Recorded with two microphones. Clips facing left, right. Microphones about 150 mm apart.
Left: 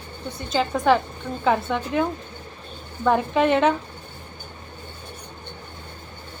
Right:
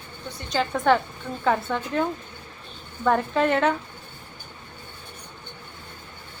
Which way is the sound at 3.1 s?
10° left (ahead or behind).